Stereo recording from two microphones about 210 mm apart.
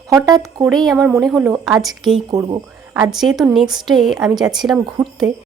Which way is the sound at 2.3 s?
20° right (ahead or behind).